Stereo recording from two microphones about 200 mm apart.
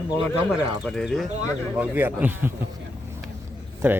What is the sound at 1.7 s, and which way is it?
Speech, 10° right (ahead or behind).